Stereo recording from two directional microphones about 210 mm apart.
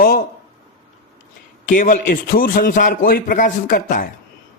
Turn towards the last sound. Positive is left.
turn(degrees=40)  # may be behind; listen again after turning